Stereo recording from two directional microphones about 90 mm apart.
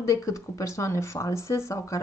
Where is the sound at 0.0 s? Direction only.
35° left (ahead or behind).